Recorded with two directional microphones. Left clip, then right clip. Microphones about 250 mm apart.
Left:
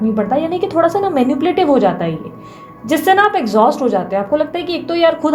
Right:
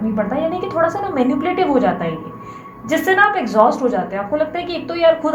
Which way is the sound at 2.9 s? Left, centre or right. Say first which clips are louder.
Left 2 dB; left.